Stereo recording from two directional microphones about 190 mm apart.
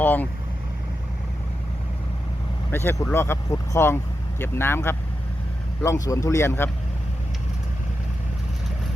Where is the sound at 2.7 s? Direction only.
15° left (ahead or behind).